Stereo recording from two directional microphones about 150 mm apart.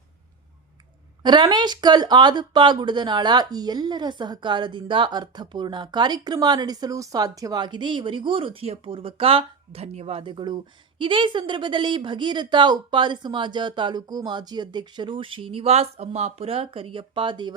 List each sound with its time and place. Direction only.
1.2 s speech: 30° right (ahead or behind)